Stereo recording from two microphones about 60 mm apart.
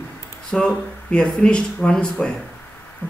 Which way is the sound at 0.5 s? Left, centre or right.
Centre.